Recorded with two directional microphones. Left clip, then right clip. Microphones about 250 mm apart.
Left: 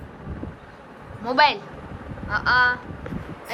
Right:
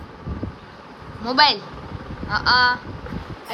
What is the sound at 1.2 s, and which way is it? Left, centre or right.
A woman's voice, centre.